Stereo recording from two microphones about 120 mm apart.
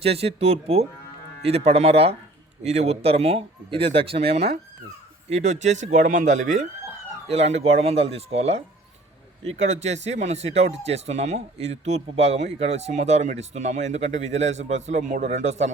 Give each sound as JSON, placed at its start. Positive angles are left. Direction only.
{"t": 0.0, "sound": "a man's voice", "side_deg": -55}
{"t": 5.3, "sound": "speech", "side_deg": -80}
{"t": 7.3, "sound": "a man's voice", "side_deg": -65}